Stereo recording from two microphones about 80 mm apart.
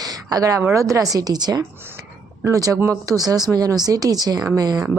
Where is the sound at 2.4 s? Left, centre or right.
Right.